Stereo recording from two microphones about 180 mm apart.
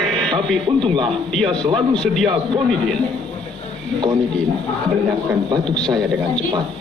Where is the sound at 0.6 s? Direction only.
25° right (ahead or behind).